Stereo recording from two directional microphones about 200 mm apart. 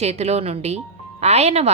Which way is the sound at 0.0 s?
30° right (ahead or behind).